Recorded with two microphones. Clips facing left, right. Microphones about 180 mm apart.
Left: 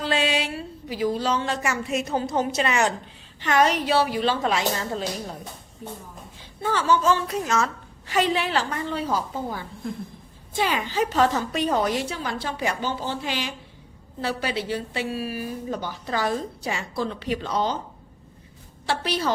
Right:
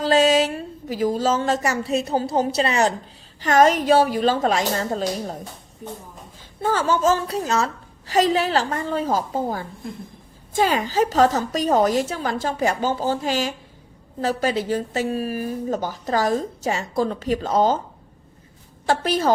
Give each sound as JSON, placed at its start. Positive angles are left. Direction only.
{"t": 0.0, "sound": "a woman's voice", "side_deg": -40}
{"t": 6.6, "sound": "a woman's voice", "side_deg": -45}
{"t": 18.9, "sound": "a woman's voice", "side_deg": -45}